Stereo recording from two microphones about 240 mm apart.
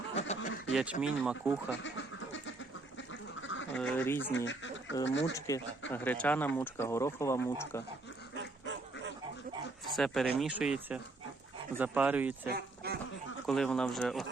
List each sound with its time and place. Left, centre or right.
0.2 s a sound: left
0.7 s speech: centre
3.1 s duck: left
3.8 s speech: centre
4.4 s speech: left
5.9 s speech: centre
8.4 s dog: right
9.9 s speech: centre
12.5 s a sound: right
13.5 s speech: centre